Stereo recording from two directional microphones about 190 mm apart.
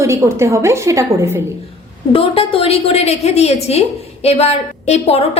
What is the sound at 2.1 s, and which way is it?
A woman's voice, 30° left (ahead or behind).